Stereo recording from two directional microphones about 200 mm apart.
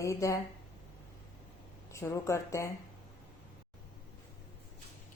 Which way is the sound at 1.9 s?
15° left (ahead or behind).